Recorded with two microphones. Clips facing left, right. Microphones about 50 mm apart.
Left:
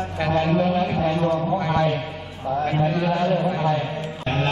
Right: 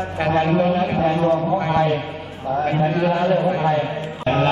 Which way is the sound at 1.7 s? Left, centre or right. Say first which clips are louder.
Right 3 dB; centre.